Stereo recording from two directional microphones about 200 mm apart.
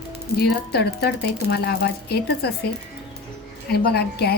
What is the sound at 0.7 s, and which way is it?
Speech, 55° left (ahead or behind).